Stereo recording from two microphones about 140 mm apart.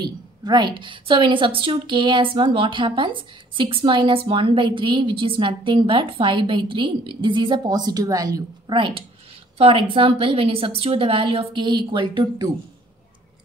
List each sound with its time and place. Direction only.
0.0 s a woman's voice: 30° right (ahead or behind)